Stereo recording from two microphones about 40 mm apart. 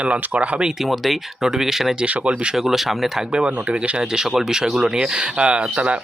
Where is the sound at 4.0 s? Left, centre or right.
Centre; by 6.0 s right.